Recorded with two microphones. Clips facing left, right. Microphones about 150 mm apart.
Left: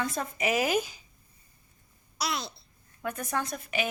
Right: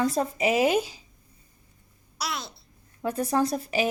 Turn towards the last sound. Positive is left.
turn(degrees=-35)  # may be behind; listen again after turning